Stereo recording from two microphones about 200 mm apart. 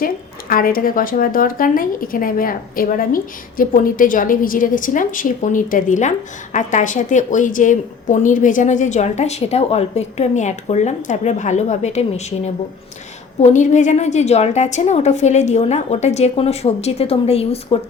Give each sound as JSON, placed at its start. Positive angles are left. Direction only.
{"t": 0.0, "sound": "a woman's voice", "side_deg": 45}
{"t": 13.4, "sound": "a woman's voice", "side_deg": 35}